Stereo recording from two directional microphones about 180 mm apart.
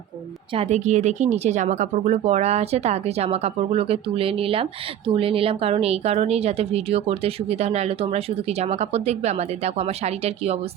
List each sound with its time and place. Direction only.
0.5 s a woman's voice: 35° right (ahead or behind)